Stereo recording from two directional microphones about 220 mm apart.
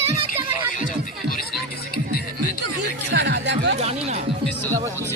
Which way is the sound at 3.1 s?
50° right (ahead or behind).